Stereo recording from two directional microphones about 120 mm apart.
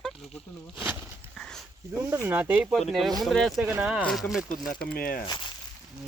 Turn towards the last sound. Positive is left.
turn(degrees=5)  # may be behind; listen again after turning